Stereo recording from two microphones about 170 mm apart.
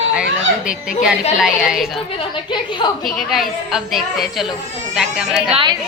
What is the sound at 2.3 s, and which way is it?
Speech, 25° left (ahead or behind).